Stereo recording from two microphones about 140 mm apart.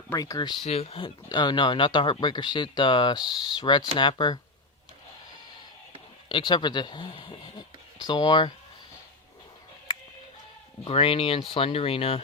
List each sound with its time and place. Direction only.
0.1 s speech: 25° left (ahead or behind)
0.6 s speech: 45° left (ahead or behind)
6.2 s speech: 35° left (ahead or behind)
10.8 s speech: 45° left (ahead or behind)